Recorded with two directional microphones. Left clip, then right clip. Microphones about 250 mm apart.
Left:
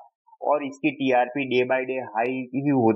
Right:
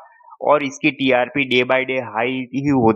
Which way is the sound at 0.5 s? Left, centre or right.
Right.